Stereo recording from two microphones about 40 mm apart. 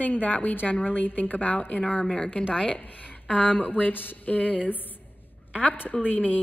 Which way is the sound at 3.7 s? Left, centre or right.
Left.